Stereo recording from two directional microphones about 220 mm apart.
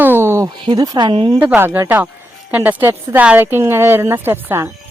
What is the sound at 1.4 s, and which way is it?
A woman's voice, 10° right (ahead or behind).